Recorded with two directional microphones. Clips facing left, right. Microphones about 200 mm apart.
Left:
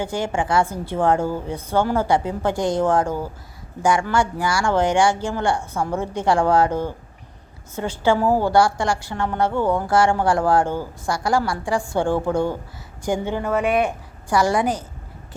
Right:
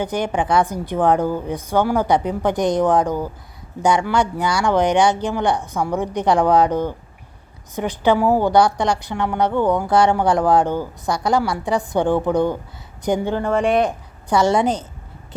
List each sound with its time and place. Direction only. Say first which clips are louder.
0.0 s a woman's voice: right 2 dB; 20° right (ahead or behind)
13.3 s speech: right 2 dB; 5° left (ahead or behind)
14.3 s speech: right 3 dB; 25° right (ahead or behind)